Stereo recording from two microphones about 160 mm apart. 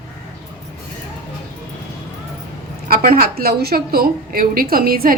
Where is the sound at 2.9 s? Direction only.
65° right (ahead or behind).